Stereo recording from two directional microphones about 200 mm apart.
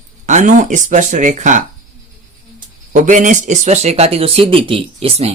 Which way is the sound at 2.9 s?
40° right (ahead or behind).